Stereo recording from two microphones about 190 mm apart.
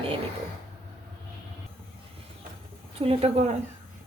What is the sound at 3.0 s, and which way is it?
Speech, 30° right (ahead or behind).